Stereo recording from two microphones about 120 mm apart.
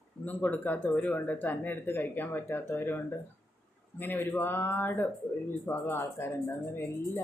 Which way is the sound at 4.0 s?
15° left (ahead or behind).